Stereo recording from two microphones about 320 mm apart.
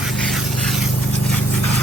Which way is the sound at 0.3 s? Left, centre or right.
Centre.